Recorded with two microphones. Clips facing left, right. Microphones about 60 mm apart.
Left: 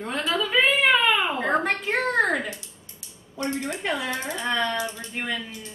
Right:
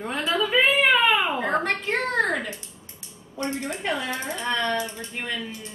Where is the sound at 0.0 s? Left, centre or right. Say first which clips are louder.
Even; centre.